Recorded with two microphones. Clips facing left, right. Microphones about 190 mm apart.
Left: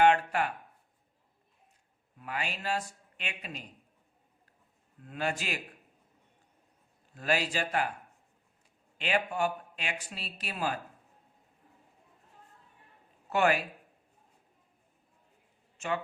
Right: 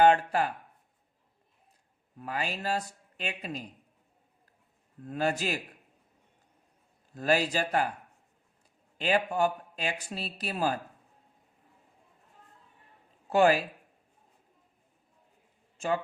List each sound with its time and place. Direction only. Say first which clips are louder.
0.0 s a sound: right 2 dB; 35° right (ahead or behind)
2.1 s speech: right 3 dB; 40° right (ahead or behind)
5.0 s speech: right 4 dB; 40° right (ahead or behind)
7.1 s speech: right 4 dB; 40° right (ahead or behind)
9.0 s speech: right 4 dB; 40° right (ahead or behind)
13.3 s speech: right 4 dB; 35° right (ahead or behind)